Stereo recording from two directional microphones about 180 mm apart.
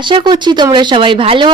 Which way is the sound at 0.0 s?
25° right (ahead or behind).